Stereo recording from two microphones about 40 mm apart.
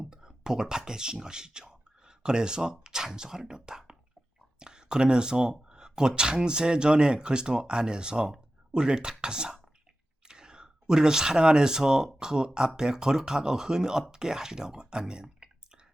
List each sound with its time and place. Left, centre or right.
0.0 s speech: centre